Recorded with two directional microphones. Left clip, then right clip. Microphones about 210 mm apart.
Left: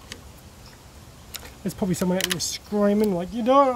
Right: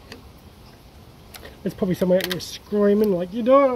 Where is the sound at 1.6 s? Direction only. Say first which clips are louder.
Right 4 dB; 30° left (ahead or behind).